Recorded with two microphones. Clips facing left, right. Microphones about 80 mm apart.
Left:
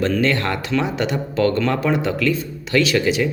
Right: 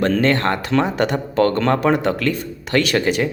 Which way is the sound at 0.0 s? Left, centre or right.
Right.